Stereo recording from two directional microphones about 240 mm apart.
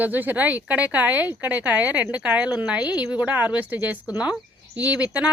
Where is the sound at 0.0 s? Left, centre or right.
Centre.